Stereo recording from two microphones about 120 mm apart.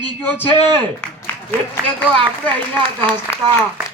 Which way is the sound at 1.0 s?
10° left (ahead or behind).